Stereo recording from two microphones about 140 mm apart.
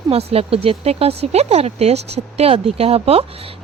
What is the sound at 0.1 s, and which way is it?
Speech, 45° right (ahead or behind).